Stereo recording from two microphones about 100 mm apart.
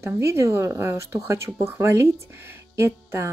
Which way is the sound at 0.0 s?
30° right (ahead or behind).